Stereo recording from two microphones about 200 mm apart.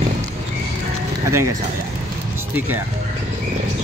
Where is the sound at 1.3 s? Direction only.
15° right (ahead or behind).